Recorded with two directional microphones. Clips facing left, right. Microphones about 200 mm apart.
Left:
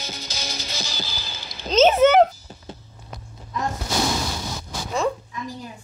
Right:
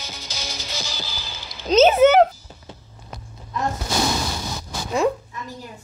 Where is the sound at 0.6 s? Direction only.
40° left (ahead or behind).